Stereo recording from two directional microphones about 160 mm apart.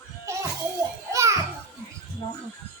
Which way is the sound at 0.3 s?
20° right (ahead or behind).